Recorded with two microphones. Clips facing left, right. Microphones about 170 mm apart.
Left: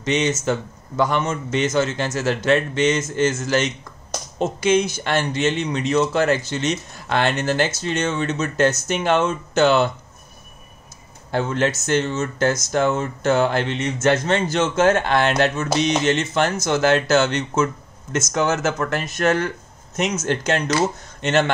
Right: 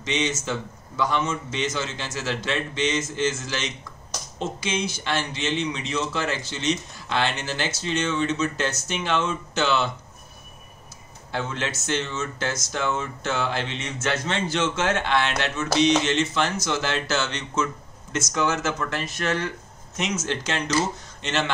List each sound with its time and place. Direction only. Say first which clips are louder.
0.0 s a man's voice: left 6 dB; 45° left (ahead or behind)
11.3 s a man's voice: left 8 dB; 45° left (ahead or behind)